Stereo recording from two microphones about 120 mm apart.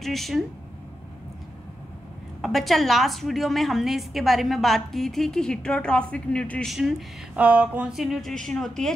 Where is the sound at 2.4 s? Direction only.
Centre (ahead or behind).